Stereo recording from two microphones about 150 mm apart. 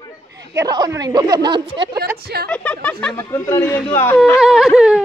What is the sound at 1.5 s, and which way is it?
Speech, 35° right (ahead or behind).